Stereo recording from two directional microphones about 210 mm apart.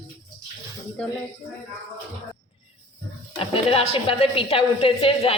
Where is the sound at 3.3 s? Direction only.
25° left (ahead or behind).